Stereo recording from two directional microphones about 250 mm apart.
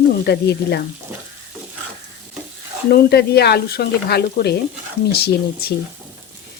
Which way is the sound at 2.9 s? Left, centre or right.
Left.